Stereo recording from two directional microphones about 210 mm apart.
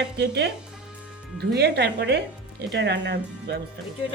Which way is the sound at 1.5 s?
50° right (ahead or behind).